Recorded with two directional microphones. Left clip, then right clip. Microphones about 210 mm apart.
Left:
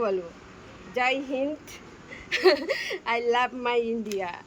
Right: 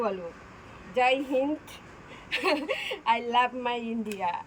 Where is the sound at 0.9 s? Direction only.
15° left (ahead or behind).